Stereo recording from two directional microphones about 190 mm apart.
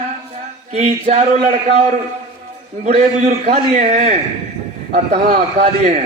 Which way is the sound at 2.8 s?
35° right (ahead or behind).